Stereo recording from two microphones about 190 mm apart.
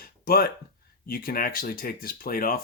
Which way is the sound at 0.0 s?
50° left (ahead or behind).